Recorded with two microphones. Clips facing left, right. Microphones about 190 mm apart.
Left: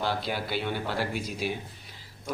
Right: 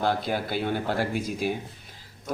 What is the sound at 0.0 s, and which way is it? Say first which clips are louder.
Speech: right 4 dB; 50° right (ahead or behind).